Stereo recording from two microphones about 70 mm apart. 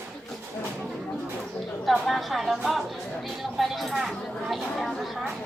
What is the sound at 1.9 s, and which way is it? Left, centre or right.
A woman's voice, centre.